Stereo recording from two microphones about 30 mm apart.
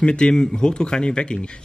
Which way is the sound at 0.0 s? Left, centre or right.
Left.